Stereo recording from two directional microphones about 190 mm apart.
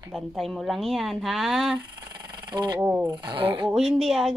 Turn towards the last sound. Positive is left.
turn(degrees=0)  # may be behind; listen again after turning